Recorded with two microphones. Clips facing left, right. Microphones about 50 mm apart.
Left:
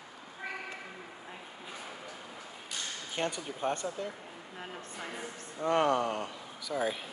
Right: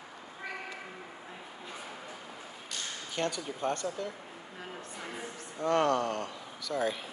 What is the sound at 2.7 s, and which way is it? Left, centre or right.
Speech, centre.